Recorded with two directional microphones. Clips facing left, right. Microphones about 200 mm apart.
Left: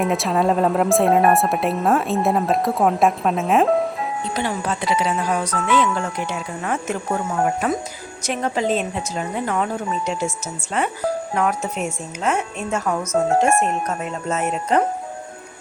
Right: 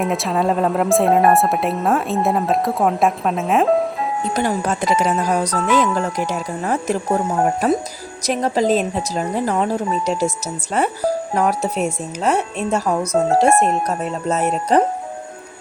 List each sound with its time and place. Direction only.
0.0 s speech: centre (ahead or behind)
4.4 s speech: 45° right (ahead or behind)